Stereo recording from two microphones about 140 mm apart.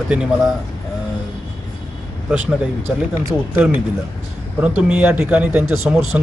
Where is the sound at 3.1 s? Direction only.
15° right (ahead or behind).